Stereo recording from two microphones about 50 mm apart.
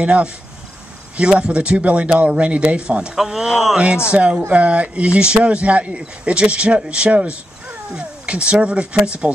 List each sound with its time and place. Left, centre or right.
0.0 s speech: right
1.3 s speech: right
3.2 s speech: centre
3.7 s speech: centre